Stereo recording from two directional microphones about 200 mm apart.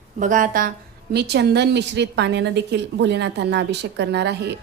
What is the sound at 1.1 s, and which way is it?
Mantra, 55° right (ahead or behind).